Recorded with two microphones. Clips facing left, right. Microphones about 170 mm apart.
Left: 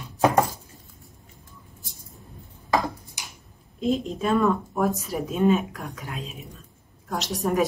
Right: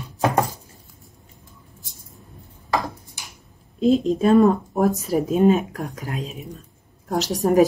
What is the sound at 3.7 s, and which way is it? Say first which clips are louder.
Speech: right 7 dB; 35° right (ahead or behind).